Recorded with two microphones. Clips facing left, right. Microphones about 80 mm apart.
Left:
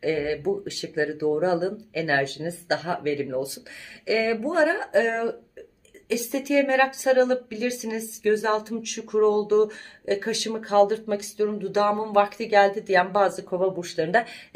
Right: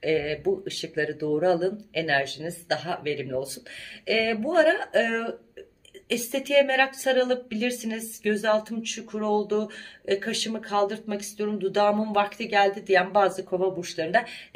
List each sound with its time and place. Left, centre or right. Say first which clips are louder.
0.0 s a woman's voice: even; left